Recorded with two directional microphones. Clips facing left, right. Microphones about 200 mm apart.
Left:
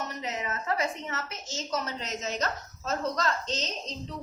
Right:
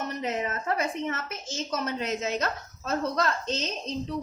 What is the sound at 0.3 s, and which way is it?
A woman's voice, 50° right (ahead or behind).